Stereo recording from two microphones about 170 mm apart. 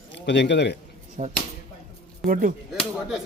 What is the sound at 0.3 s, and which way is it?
Speech, 90° left.